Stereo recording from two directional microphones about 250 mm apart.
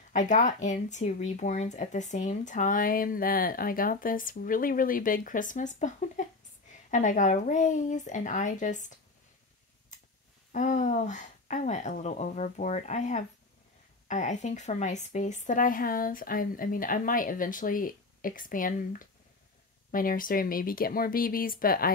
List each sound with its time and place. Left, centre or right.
0.1 s speech: left
10.5 s speech: left